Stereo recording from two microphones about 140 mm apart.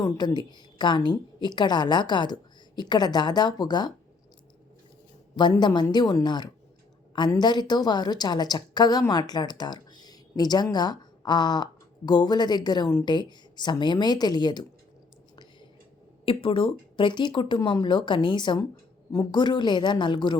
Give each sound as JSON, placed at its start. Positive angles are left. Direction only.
{"t": 0.0, "sound": "a woman's voice", "side_deg": 30}
{"t": 5.4, "sound": "a woman's voice", "side_deg": 30}
{"t": 16.2, "sound": "a woman's voice", "side_deg": 40}
{"t": 19.1, "sound": "a woman's voice", "side_deg": 20}
{"t": 19.4, "sound": "a woman's voice", "side_deg": 30}